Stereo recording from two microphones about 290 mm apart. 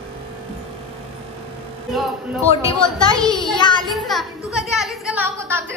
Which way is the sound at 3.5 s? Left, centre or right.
Centre.